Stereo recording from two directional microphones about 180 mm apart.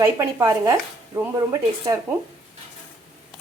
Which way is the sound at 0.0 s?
15° right (ahead or behind).